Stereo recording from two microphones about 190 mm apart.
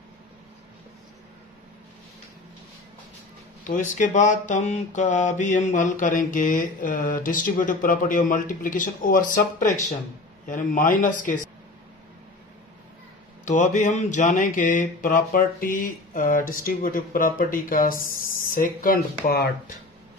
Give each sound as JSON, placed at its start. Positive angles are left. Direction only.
{"t": 3.6, "sound": "speech", "side_deg": 40}
{"t": 13.5, "sound": "speech", "side_deg": 40}